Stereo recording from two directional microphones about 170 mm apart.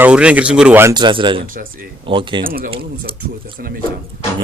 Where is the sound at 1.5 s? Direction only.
55° right (ahead or behind).